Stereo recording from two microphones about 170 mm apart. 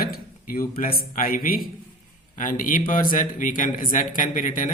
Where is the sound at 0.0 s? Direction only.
60° left (ahead or behind).